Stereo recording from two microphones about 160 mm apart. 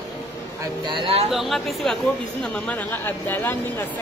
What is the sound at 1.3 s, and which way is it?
Speech, centre (ahead or behind).